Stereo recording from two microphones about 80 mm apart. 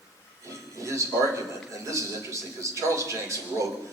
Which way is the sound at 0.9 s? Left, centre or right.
Right.